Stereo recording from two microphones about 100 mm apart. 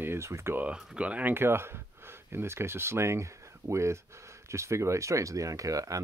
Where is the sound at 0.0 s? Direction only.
25° right (ahead or behind).